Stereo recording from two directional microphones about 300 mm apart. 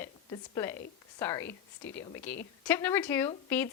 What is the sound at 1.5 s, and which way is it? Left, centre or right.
Speech, left.